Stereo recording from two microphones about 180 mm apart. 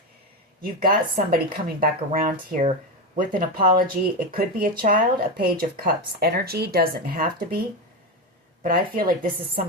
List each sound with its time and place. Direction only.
0.6 s speech: 55° right (ahead or behind)
8.6 s speech: 50° right (ahead or behind)